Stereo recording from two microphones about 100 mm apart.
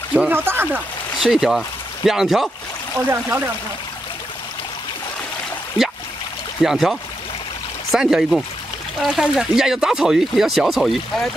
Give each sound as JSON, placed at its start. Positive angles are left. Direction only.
{"t": 0.3, "sound": "speech", "side_deg": -20}
{"t": 1.2, "sound": "speech", "side_deg": -5}
{"t": 3.1, "sound": "speech", "side_deg": -20}
{"t": 6.6, "sound": "speech", "side_deg": -5}